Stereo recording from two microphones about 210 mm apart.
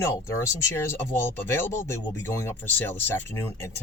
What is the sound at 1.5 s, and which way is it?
A man's voice, 10° left (ahead or behind).